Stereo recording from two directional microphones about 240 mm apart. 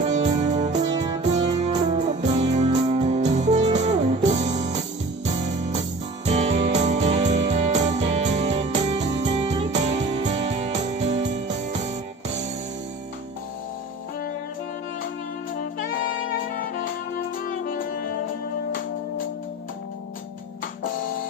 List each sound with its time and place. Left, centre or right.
0.1 s music: right
0.9 s music: centre
1.3 s music: right
6.2 s music: right